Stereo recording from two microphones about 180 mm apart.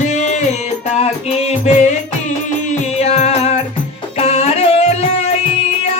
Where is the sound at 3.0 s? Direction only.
40° left (ahead or behind).